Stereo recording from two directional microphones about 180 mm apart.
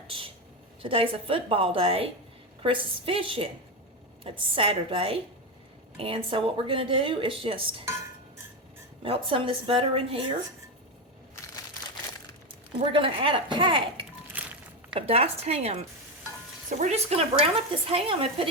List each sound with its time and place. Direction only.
0.8 s a woman's voice: 30° right (ahead or behind)
9.0 s speech: 30° right (ahead or behind)
12.9 s speech: 30° right (ahead or behind)
14.3 s a sound: 10° right (ahead or behind)
14.9 s a woman's voice: 35° right (ahead or behind)